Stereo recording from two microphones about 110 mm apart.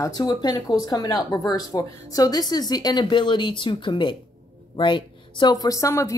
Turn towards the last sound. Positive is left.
turn(degrees=30)  # may be behind; listen again after turning